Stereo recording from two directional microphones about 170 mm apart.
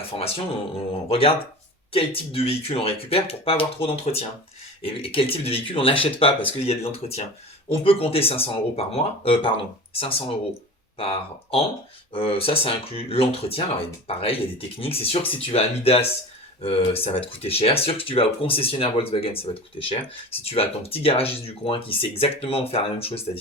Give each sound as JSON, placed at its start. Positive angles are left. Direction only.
{"t": 0.0, "sound": "speech", "side_deg": 35}